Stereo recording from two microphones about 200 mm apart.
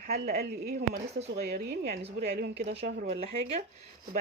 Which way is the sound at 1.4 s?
50° right (ahead or behind).